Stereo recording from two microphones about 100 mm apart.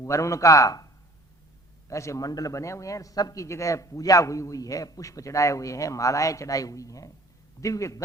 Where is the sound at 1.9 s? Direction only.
30° left (ahead or behind).